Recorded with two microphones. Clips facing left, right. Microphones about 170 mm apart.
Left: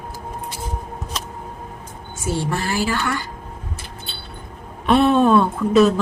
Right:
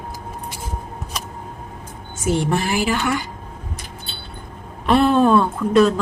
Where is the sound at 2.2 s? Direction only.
20° right (ahead or behind).